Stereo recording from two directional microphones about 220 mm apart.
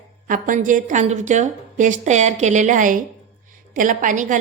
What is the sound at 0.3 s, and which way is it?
A woman's voice, 35° right (ahead or behind).